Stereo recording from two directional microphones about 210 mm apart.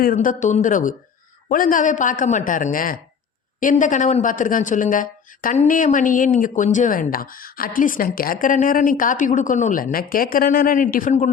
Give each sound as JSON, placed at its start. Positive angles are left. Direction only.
{"t": 0.0, "sound": "speech", "side_deg": 40}